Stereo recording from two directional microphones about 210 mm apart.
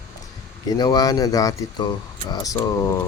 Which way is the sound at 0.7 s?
20° left (ahead or behind).